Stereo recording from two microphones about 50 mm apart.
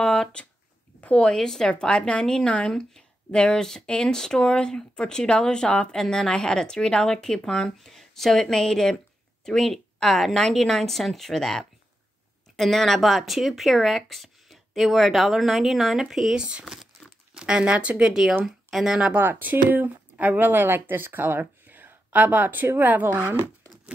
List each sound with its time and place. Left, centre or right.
0.0 s speech: centre
16.3 s speech: centre
18.0 s speech: centre
19.1 s speech: right